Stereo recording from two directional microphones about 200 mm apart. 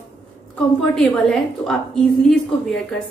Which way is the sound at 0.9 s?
Centre (ahead or behind).